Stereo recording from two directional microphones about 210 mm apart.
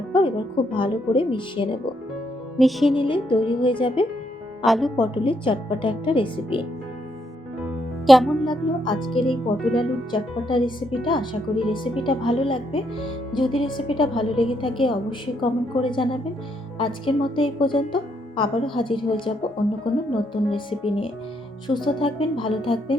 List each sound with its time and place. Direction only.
0.1 s speech: 25° left (ahead or behind)
2.6 s music: centre (ahead or behind)
2.9 s speech: 25° left (ahead or behind)
4.6 s music: centre (ahead or behind)
4.9 s speech: 25° left (ahead or behind)
7.6 s music: centre (ahead or behind)
8.8 s speech: 25° left (ahead or behind)
9.6 s music: centre (ahead or behind)
10.1 s speech: 25° left (ahead or behind)
20.3 s speech: 25° left (ahead or behind)